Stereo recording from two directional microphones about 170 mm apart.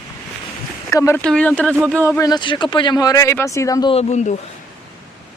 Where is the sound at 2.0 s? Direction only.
20° left (ahead or behind).